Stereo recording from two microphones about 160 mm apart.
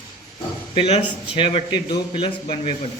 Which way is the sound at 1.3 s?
35° left (ahead or behind).